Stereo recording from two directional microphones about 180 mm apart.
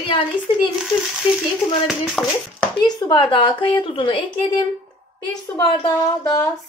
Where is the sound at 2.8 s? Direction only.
25° left (ahead or behind).